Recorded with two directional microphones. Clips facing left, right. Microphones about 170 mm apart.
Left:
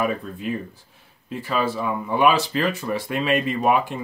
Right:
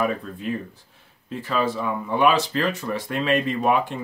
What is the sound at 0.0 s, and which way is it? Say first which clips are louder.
Speech: even; 10° left (ahead or behind).